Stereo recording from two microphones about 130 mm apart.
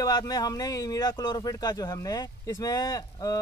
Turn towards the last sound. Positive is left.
turn(degrees=30)  # may be behind; listen again after turning